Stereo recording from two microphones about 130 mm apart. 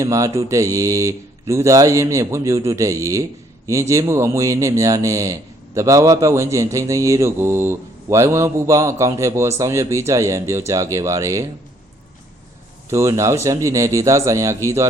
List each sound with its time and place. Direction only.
0.0 s speech: 25° right (ahead or behind)
12.9 s speech: 20° right (ahead or behind)